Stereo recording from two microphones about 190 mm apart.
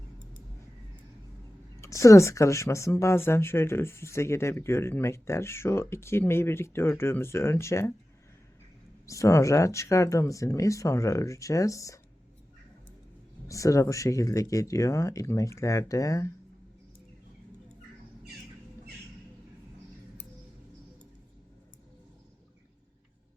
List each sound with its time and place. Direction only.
1.8 s speech: 15° left (ahead or behind)
9.0 s speech: 15° left (ahead or behind)
13.5 s speech: 15° left (ahead or behind)